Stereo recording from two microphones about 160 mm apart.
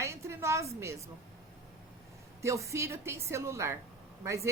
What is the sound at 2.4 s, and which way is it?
A woman's voice, 20° right (ahead or behind).